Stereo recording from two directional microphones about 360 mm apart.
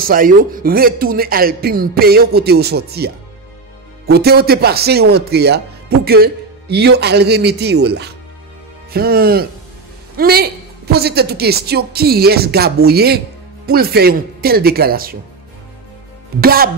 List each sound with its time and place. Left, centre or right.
0.0 s speech: right
4.1 s speech: right
16.3 s speech: right